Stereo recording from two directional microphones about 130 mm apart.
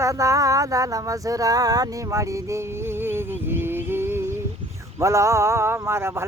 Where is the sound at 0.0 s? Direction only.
25° right (ahead or behind).